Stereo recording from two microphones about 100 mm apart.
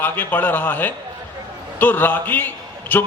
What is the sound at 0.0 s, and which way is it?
A man's voice, 20° left (ahead or behind).